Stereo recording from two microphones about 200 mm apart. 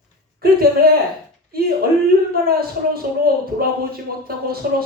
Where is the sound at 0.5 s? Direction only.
50° right (ahead or behind).